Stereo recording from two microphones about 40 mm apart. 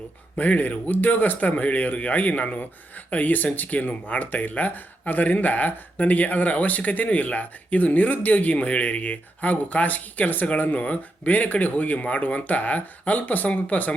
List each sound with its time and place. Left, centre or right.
0.3 s speech: left